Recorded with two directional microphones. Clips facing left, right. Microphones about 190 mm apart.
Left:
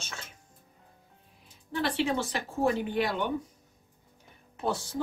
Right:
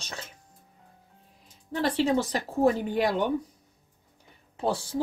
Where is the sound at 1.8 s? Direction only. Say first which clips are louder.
Right 4 dB; 40° right (ahead or behind).